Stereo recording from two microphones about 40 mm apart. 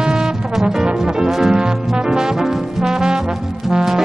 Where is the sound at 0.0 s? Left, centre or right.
Centre.